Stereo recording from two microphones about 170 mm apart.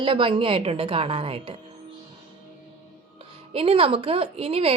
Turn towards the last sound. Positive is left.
turn(degrees=-35)  # may be behind; listen again after turning